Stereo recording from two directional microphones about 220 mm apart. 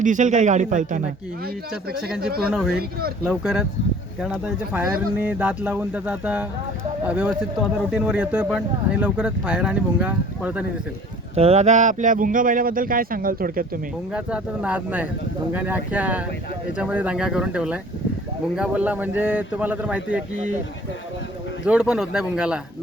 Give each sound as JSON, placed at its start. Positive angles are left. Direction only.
{"t": 0.0, "sound": "speech", "side_deg": -35}
{"t": 1.9, "sound": "speech", "side_deg": -45}
{"t": 2.5, "sound": "speech", "side_deg": -5}
{"t": 11.3, "sound": "speech", "side_deg": -30}
{"t": 14.1, "sound": "speech", "side_deg": -5}
{"t": 21.7, "sound": "speech", "side_deg": -5}